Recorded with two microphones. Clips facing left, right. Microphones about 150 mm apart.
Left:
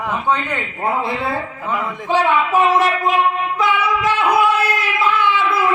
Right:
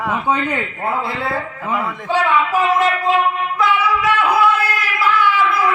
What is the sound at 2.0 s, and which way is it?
Speech, 20° left (ahead or behind).